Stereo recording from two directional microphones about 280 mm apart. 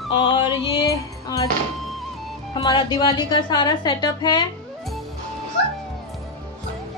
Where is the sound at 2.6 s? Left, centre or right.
Centre.